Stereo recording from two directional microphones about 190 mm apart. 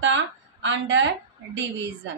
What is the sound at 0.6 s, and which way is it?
Speech, 70° right (ahead or behind).